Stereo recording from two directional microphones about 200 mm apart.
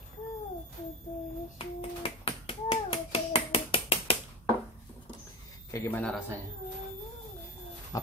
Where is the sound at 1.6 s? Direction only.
30° left (ahead or behind).